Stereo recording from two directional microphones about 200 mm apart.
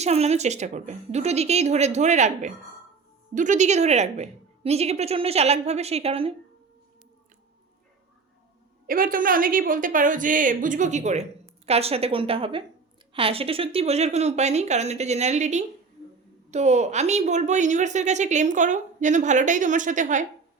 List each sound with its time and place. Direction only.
0.0 s a woman's voice: 35° right (ahead or behind)
8.9 s a woman's voice: 45° right (ahead or behind)